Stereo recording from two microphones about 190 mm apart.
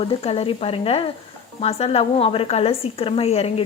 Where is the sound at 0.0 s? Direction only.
30° left (ahead or behind).